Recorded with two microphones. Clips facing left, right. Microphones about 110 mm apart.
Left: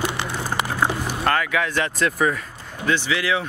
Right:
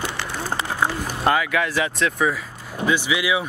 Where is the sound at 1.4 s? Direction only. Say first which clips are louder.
Right 1 dB; centre (ahead or behind).